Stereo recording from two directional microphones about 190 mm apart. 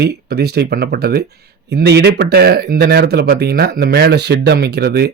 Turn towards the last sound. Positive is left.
turn(degrees=-55)  # may be behind; listen again after turning